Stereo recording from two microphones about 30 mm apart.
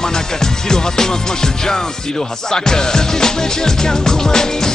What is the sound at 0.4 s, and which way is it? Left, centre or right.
Music, left.